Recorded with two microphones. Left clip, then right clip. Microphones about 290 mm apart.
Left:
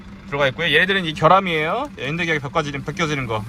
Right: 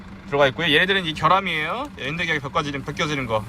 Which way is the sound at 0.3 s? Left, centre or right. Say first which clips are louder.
Right 1 dB; centre.